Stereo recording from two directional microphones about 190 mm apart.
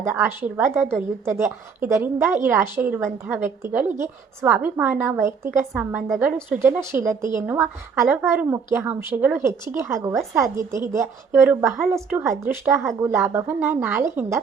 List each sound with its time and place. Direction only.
0.2 s a woman's voice: 10° right (ahead or behind)